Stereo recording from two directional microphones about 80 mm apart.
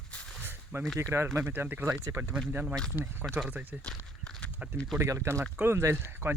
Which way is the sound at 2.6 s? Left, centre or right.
Centre.